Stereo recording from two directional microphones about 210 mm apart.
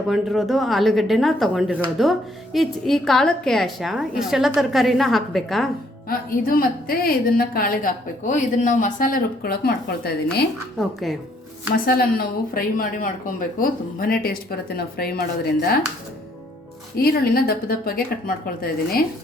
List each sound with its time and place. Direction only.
0.1 s speech: centre (ahead or behind)
6.1 s a woman's voice: 45° left (ahead or behind)
10.8 s speech: centre (ahead or behind)
11.9 s a woman's voice: 45° left (ahead or behind)
17.0 s a woman's voice: 45° left (ahead or behind)